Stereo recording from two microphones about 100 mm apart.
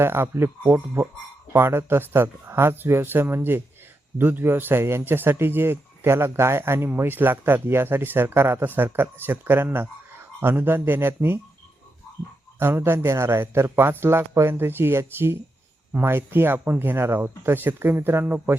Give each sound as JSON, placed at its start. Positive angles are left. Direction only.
{"t": 0.0, "sound": "speech", "side_deg": -25}
{"t": 12.5, "sound": "speech", "side_deg": -25}